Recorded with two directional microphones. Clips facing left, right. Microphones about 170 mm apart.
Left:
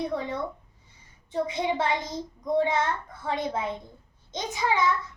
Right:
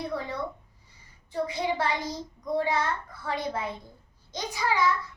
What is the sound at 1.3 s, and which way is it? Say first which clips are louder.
A child's voice: left 2 dB; 20° left (ahead or behind).